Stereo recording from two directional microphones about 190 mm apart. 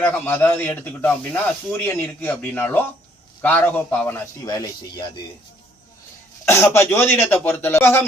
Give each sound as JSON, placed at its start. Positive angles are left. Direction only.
{"t": 0.0, "sound": "speech", "side_deg": 10}
{"t": 4.4, "sound": "speech", "side_deg": 25}
{"t": 6.4, "sound": "speech", "side_deg": 15}